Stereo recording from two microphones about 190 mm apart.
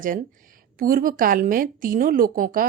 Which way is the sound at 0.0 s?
45° right (ahead or behind).